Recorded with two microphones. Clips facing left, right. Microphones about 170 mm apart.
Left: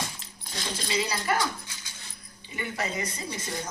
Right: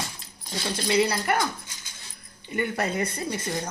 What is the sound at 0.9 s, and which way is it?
Speech, 65° right (ahead or behind).